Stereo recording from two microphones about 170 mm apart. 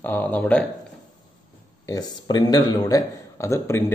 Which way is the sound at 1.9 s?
25° left (ahead or behind).